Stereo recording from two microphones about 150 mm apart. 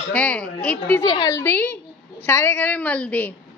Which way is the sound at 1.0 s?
30° left (ahead or behind).